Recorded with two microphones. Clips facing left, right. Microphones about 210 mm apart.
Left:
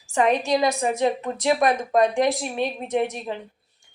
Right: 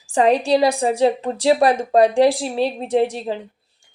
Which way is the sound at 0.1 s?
35° right (ahead or behind).